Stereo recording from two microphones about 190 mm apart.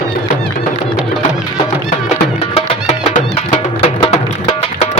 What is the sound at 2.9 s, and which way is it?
Music, 35° left (ahead or behind).